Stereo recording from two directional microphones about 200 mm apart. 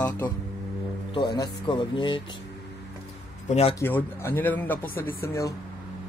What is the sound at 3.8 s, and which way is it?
Speech, 10° left (ahead or behind).